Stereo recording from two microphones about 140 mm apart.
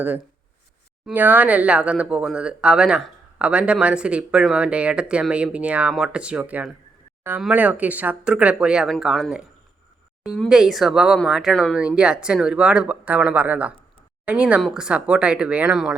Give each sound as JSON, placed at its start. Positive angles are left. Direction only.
{"t": 1.1, "sound": "speech", "side_deg": -10}
{"t": 11.8, "sound": "speech", "side_deg": -5}